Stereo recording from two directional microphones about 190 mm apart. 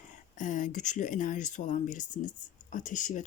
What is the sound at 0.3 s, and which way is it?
Speech, 40° left (ahead or behind).